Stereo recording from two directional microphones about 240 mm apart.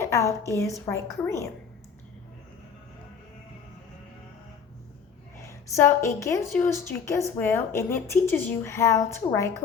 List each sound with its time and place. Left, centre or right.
0.0 s speech: centre
5.5 s a woman's voice: centre
6.4 s speech: centre